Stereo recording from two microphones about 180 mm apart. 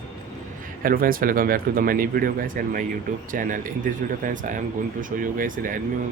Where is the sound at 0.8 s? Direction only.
50° right (ahead or behind).